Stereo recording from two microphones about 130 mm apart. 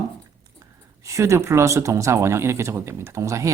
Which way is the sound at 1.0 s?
25° right (ahead or behind).